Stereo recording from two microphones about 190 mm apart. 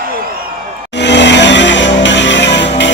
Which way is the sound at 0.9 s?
65° left (ahead or behind).